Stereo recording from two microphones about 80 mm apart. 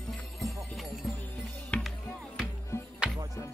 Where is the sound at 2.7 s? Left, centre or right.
Left.